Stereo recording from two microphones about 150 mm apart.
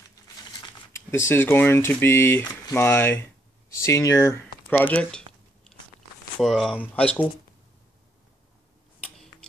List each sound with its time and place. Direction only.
0.9 s speech: 20° left (ahead or behind)
6.4 s speech: 5° left (ahead or behind)